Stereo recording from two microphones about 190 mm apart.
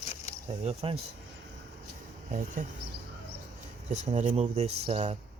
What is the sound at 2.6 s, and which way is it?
Speech, 45° right (ahead or behind).